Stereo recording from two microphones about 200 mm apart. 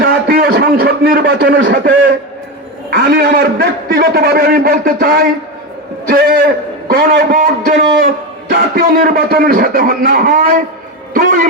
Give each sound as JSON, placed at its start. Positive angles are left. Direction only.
{"t": 0.0, "sound": "a man's voice", "side_deg": -45}